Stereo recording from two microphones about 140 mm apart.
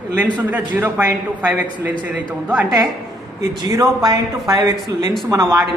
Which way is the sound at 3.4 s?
20° right (ahead or behind).